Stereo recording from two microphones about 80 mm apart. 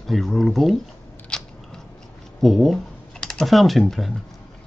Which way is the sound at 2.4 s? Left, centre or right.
Centre.